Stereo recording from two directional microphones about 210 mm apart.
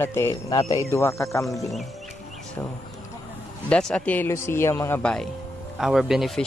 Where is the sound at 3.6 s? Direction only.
5° left (ahead or behind).